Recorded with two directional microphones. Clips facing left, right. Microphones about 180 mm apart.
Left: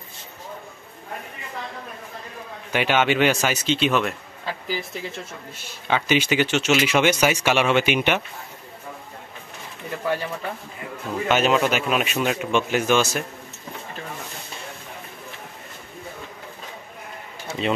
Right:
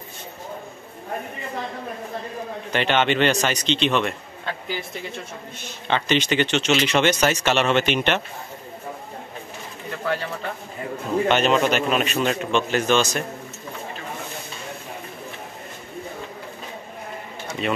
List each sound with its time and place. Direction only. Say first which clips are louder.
2.7 s speech: even; 10° left (ahead or behind)
11.2 s speech: even; 5° left (ahead or behind)
17.5 s pigeon: left 1 dB; 25° left (ahead or behind)